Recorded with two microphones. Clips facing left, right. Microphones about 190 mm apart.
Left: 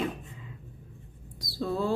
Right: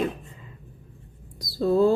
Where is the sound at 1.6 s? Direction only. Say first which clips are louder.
Right 10 dB; 40° right (ahead or behind).